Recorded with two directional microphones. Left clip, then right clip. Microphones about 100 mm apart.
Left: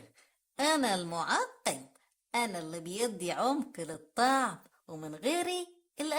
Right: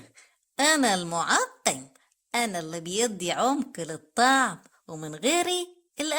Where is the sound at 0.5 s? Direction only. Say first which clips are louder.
Right 6 dB; 35° right (ahead or behind).